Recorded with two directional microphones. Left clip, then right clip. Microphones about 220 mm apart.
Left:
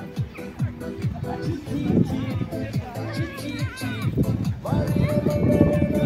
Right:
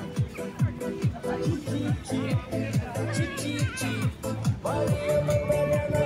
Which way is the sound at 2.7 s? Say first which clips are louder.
Even; 25° right (ahead or behind).